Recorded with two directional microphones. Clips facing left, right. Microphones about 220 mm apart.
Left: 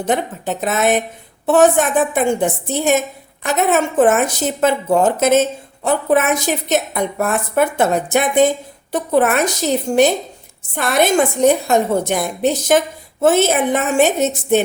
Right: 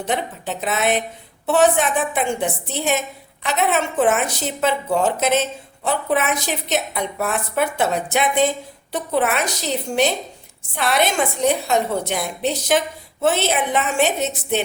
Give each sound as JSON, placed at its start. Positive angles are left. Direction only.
{"t": 0.0, "sound": "a woman's voice", "side_deg": 45}